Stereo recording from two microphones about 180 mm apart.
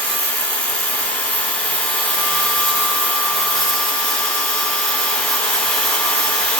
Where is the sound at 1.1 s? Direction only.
10° left (ahead or behind).